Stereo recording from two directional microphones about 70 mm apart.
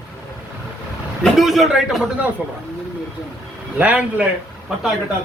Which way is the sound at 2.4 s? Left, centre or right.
Centre.